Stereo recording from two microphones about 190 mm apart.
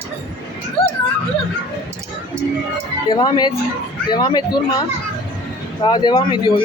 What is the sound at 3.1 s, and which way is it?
Speech, 25° left (ahead or behind).